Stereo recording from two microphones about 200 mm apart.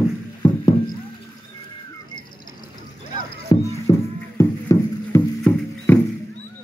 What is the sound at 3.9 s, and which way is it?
Music, 15° left (ahead or behind).